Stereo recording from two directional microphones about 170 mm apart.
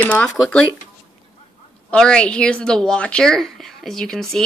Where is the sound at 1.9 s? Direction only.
5° left (ahead or behind).